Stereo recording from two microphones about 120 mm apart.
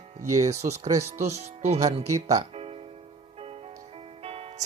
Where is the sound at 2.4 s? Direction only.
55° right (ahead or behind).